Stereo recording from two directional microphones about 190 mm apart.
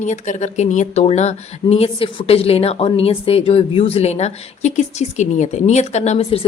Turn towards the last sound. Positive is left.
turn(degrees=30)  # may be behind; listen again after turning